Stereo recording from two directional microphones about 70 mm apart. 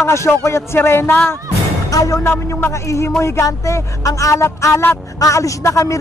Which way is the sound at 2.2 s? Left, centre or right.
Left.